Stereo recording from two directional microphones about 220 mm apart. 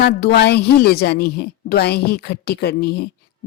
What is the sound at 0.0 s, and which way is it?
A woman's voice, 50° left (ahead or behind).